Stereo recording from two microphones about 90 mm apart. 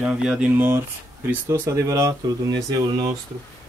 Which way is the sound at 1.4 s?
35° right (ahead or behind).